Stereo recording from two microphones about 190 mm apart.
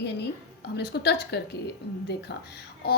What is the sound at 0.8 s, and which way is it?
A woman's voice, 60° left (ahead or behind).